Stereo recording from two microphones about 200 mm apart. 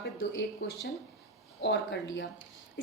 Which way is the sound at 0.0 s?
60° left (ahead or behind).